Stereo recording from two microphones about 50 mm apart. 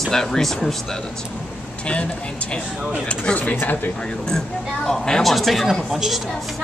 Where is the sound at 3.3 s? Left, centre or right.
Centre.